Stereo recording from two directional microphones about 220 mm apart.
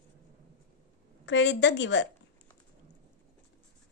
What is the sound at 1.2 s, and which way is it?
Speech, 55° left (ahead or behind).